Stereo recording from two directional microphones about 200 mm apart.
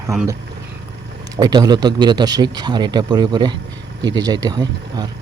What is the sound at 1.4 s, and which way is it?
Speech, 20° right (ahead or behind).